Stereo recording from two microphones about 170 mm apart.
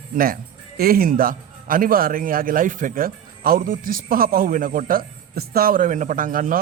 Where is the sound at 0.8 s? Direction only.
60° right (ahead or behind).